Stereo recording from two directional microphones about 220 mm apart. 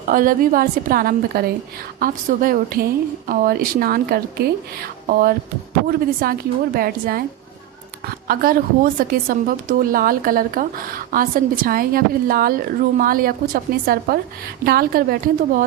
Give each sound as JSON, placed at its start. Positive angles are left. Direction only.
{"t": 0.1, "sound": "a woman's voice", "side_deg": -40}
{"t": 8.3, "sound": "a woman's voice", "side_deg": -40}